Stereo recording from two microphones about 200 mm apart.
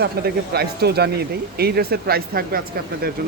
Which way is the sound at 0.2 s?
50° right (ahead or behind).